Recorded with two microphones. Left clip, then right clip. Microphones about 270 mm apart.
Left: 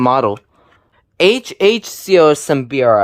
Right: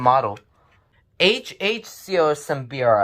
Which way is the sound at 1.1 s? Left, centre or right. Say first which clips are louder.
Left 6 dB; centre.